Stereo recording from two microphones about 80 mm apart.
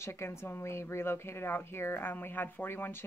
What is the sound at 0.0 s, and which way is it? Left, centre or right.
Speech, left.